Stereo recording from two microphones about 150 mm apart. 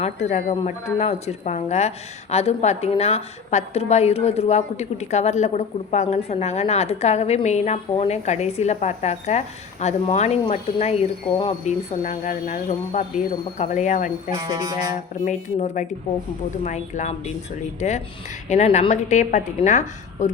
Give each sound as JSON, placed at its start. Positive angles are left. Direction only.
{"t": 0.0, "sound": "a woman's voice", "side_deg": 50}
{"t": 14.3, "sound": "music", "side_deg": -25}
{"t": 15.2, "sound": "a woman's voice", "side_deg": 50}